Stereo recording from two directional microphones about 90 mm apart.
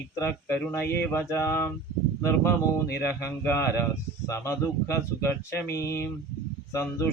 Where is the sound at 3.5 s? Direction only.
30° left (ahead or behind).